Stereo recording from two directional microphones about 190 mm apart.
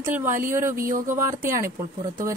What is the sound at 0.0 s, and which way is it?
Speech, 10° right (ahead or behind).